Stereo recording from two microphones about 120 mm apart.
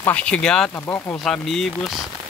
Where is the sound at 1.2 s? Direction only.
5° left (ahead or behind).